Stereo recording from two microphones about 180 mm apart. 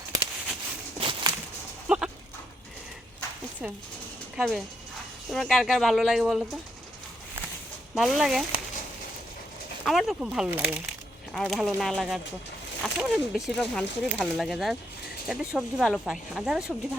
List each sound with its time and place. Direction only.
0.9 s a sound: 30° right (ahead or behind)
1.9 s sheep: 5° right (ahead or behind)
4.4 s speech: centre (ahead or behind)
7.9 s speech: centre (ahead or behind)
9.8 s speech: centre (ahead or behind)